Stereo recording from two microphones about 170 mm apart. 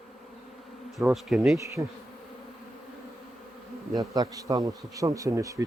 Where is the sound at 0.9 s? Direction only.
Centre (ahead or behind).